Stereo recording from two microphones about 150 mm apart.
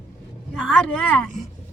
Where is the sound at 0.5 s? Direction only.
Centre (ahead or behind).